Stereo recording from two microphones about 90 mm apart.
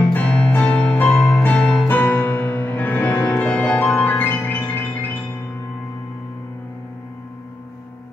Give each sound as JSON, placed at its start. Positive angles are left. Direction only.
{"t": 0.0, "sound": "music", "side_deg": 15}